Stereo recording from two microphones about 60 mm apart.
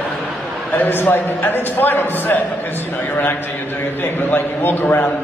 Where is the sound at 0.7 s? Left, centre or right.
Left.